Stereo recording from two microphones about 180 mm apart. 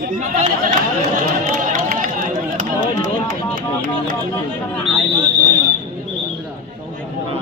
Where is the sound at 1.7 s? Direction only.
50° right (ahead or behind).